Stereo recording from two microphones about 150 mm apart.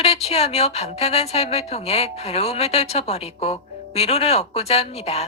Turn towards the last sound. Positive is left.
turn(degrees=45)  # may be behind; listen again after turning